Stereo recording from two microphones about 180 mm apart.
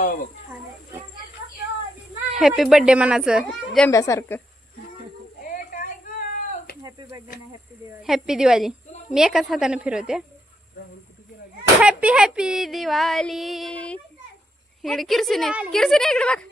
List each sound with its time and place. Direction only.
2.3 s speech: centre (ahead or behind)
3.9 s speech: 15° left (ahead or behind)
5.4 s a sound: 50° left (ahead or behind)
6.8 s snake: 20° right (ahead or behind)
8.0 s speech: centre (ahead or behind)
11.8 s speech: 5° right (ahead or behind)